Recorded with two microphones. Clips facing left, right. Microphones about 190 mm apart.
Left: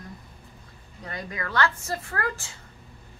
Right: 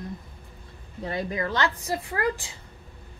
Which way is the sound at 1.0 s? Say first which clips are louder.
Right 6 dB; 25° right (ahead or behind).